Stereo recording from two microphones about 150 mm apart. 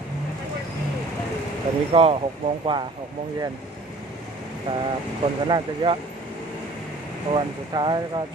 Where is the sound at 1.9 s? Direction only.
40° right (ahead or behind).